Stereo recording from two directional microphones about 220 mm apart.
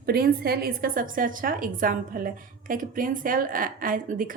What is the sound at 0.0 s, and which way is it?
A woman's voice, 45° right (ahead or behind).